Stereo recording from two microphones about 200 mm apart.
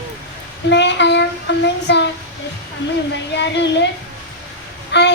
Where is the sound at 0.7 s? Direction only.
60° left (ahead or behind).